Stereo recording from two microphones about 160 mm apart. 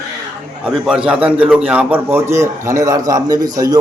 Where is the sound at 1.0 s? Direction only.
10° right (ahead or behind).